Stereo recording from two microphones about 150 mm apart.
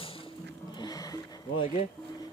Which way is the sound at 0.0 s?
40° left (ahead or behind).